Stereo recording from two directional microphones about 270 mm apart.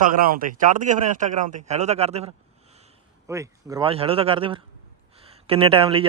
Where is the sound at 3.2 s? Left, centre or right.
Centre.